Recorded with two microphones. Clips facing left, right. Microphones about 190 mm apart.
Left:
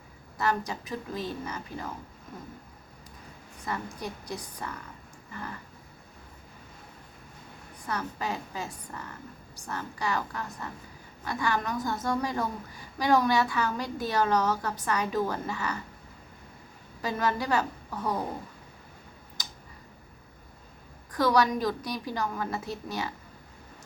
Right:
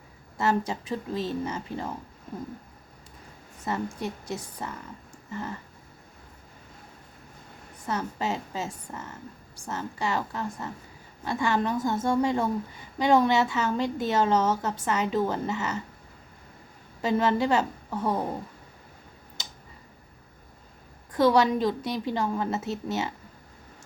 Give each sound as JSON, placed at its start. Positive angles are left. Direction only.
{"t": 0.3, "sound": "a woman's voice", "side_deg": -25}
{"t": 3.7, "sound": "a woman's voice", "side_deg": -25}
{"t": 7.9, "sound": "a woman's voice", "side_deg": -25}
{"t": 17.0, "sound": "a woman's voice", "side_deg": -25}
{"t": 19.4, "sound": "tick", "side_deg": -25}
{"t": 21.1, "sound": "a woman's voice", "side_deg": -25}